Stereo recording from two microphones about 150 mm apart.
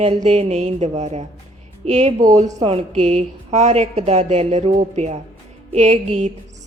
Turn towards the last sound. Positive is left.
turn(degrees=-50)  # may be behind; listen again after turning